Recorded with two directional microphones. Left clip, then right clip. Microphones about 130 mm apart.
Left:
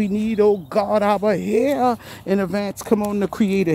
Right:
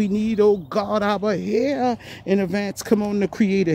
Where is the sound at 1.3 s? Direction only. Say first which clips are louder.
Left 3 dB; 5° left (ahead or behind).